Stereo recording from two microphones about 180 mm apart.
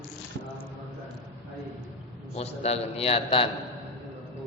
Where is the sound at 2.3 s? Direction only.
35° left (ahead or behind).